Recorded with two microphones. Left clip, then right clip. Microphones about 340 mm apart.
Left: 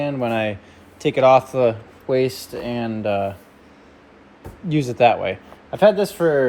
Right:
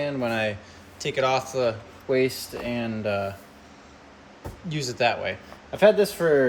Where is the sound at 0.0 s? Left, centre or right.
Centre.